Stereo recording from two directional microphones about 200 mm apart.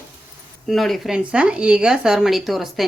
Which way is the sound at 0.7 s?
Centre (ahead or behind).